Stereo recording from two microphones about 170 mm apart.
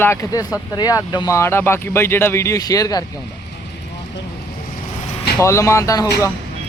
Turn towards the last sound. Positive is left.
turn(degrees=20)  # may be behind; listen again after turning